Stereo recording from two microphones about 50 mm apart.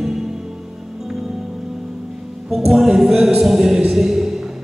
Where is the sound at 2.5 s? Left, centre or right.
Centre.